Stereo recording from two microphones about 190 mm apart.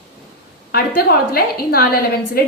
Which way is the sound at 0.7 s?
55° left (ahead or behind).